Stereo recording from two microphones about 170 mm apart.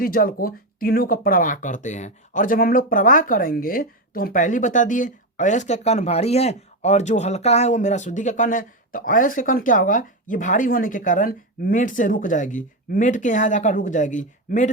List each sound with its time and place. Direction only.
0.0 s speech: 55° left (ahead or behind)